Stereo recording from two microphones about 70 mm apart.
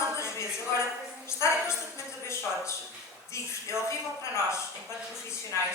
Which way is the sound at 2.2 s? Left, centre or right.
Left.